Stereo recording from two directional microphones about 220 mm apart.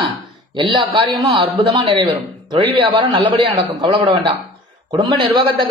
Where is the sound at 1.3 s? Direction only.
20° right (ahead or behind).